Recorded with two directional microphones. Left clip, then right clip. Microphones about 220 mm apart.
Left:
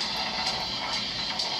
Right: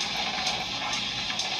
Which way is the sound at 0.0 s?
20° right (ahead or behind).